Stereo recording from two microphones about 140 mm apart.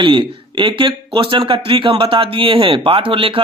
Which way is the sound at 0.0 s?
35° right (ahead or behind).